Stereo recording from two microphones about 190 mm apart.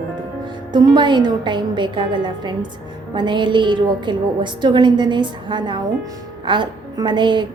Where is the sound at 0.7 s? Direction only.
25° right (ahead or behind).